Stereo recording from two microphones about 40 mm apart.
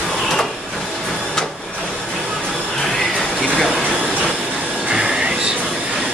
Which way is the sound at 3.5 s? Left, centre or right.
Centre.